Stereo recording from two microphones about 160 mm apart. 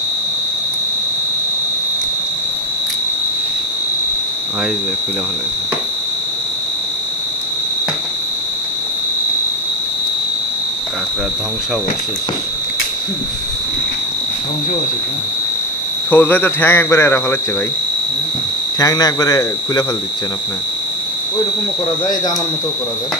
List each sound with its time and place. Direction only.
16.1 s speech: 10° left (ahead or behind)
18.8 s speech: 20° left (ahead or behind)